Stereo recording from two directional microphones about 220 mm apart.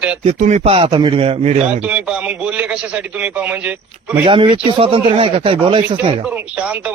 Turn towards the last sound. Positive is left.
turn(degrees=-5)  # may be behind; listen again after turning